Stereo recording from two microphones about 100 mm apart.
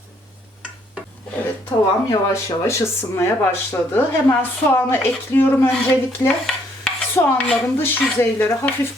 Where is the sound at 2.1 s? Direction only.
30° left (ahead or behind).